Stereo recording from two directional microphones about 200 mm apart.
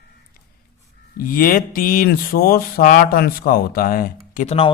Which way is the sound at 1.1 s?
45° left (ahead or behind).